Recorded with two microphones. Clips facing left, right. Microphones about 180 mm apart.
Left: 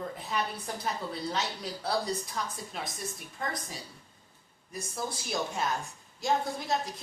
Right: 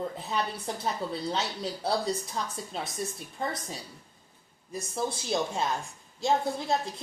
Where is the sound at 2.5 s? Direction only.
25° right (ahead or behind).